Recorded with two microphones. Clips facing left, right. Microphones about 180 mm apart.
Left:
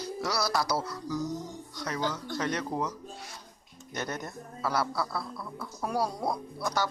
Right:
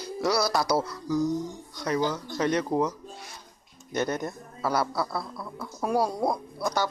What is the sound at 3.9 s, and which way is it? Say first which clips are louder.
A man's voice: right 7 dB; 20° right (ahead or behind).